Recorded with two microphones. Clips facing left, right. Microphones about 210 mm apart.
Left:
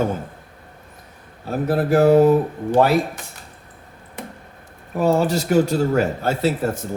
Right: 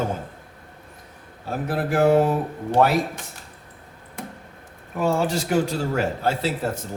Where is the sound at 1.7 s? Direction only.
40° left (ahead or behind).